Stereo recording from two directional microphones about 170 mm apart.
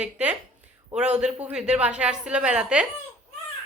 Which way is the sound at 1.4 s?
5° right (ahead or behind).